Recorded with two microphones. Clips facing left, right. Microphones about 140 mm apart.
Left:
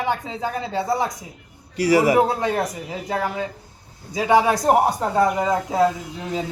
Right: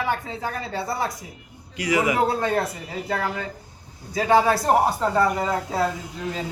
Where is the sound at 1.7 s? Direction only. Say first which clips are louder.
Left 5 dB; 35° left (ahead or behind).